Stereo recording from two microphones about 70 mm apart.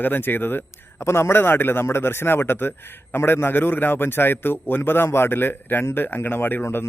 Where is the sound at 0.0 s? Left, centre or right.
Left.